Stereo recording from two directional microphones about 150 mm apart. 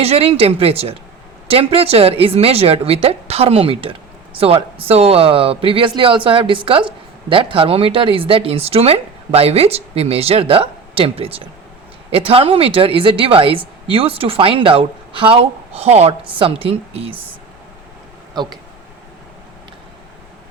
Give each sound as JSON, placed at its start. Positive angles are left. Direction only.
{"t": 0.0, "sound": "speech", "side_deg": -40}
{"t": 18.3, "sound": "speech", "side_deg": -30}